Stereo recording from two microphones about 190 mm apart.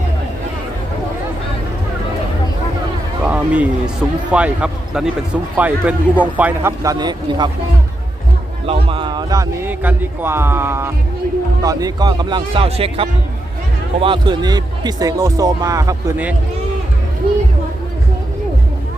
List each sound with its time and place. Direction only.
3.2 s a sound: 10° right (ahead or behind)
4.3 s a man's voice: 5° right (ahead or behind); by 7.5 s 25° right (ahead or behind)
8.6 s a man's voice: 30° right (ahead or behind); by 16.3 s 10° right (ahead or behind)